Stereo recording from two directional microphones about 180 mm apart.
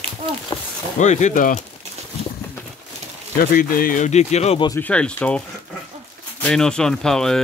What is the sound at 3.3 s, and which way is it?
Speech, 50° left (ahead or behind).